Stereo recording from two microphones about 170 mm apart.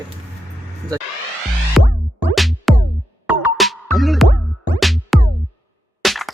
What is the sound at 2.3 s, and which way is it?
Music, centre (ahead or behind).